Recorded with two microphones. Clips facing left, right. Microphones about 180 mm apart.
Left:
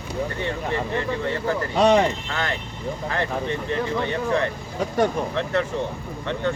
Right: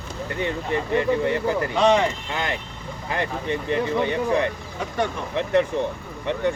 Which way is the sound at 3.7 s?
15° right (ahead or behind).